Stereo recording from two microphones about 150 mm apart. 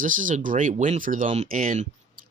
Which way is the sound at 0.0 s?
60° right (ahead or behind).